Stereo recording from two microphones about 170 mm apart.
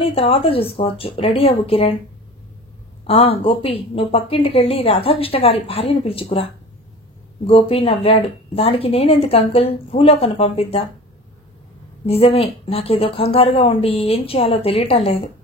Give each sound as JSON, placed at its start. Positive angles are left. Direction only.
{"t": 0.0, "sound": "speech", "side_deg": 35}
{"t": 3.1, "sound": "speech", "side_deg": 35}
{"t": 7.4, "sound": "speech", "side_deg": 35}
{"t": 12.1, "sound": "speech", "side_deg": 35}